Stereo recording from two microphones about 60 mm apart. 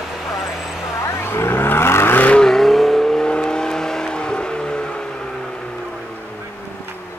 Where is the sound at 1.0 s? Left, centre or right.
Left.